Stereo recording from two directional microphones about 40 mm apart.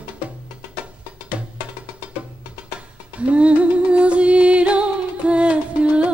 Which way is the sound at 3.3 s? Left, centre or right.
Right.